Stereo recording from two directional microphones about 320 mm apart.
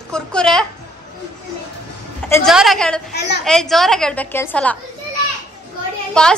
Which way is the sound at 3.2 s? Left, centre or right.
Left.